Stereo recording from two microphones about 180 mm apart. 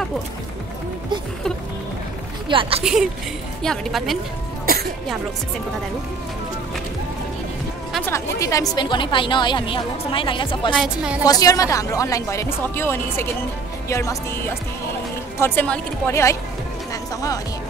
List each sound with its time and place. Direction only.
2.5 s speech: 30° right (ahead or behind)
2.8 s a woman's voice: 5° right (ahead or behind)
8.4 s a woman's voice: 15° left (ahead or behind)
10.7 s a woman's voice: centre (ahead or behind)
11.2 s speech: 20° left (ahead or behind)
16.9 s music: 20° left (ahead or behind)